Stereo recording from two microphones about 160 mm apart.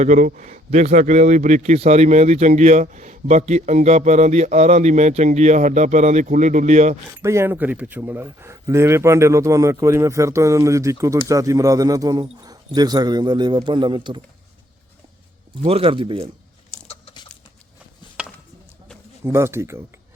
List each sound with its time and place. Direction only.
0.0 s a man's voice: 50° right (ahead or behind)
7.2 s speech: 15° right (ahead or behind)
15.6 s speech: 35° right (ahead or behind)
16.9 s crunch: 35° left (ahead or behind)
19.2 s speech: 15° right (ahead or behind)